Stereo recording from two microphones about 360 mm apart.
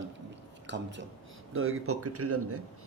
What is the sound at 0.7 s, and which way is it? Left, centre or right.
A man's voice, right.